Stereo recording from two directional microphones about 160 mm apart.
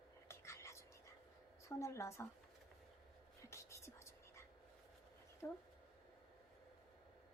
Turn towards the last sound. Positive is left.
turn(degrees=15)  # may be behind; listen again after turning